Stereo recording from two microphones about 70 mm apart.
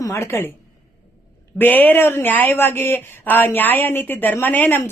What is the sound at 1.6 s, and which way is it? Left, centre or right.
Speech, left.